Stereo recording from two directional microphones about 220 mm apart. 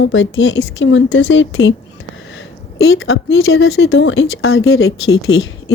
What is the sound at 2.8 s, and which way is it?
Speech, 65° left (ahead or behind).